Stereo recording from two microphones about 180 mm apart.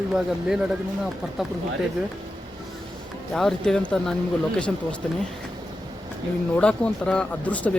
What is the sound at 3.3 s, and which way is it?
Speech, centre (ahead or behind).